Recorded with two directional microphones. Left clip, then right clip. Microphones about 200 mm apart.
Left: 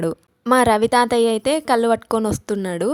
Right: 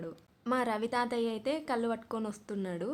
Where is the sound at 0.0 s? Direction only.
45° left (ahead or behind).